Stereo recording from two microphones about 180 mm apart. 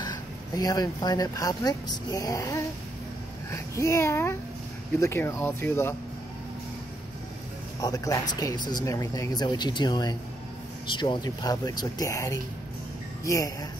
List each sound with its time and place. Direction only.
0.0 s speech: 20° left (ahead or behind)
7.8 s speech: 20° left (ahead or behind)